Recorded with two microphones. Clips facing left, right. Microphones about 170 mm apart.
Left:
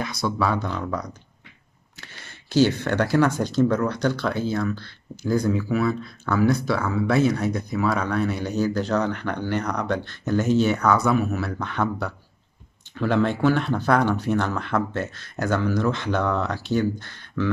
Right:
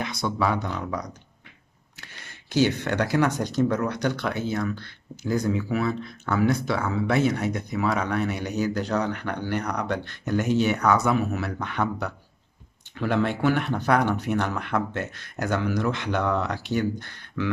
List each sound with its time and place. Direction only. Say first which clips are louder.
0.0 s speech: left 1 dB; 25° right (ahead or behind)
2.5 s speech: left 3 dB; 15° right (ahead or behind)